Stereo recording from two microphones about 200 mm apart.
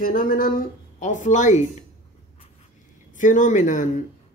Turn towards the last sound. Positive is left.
turn(degrees=40)  # may be behind; listen again after turning